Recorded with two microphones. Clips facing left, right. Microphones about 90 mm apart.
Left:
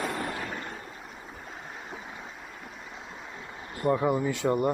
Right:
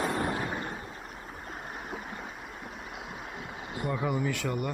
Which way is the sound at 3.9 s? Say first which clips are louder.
Left 6 dB; 25° left (ahead or behind).